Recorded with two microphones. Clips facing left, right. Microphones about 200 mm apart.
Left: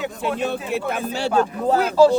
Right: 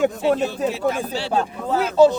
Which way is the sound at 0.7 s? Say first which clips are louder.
Right 1 dB; 55° left (ahead or behind).